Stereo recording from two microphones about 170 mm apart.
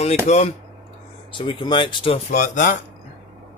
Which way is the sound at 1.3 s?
30° left (ahead or behind).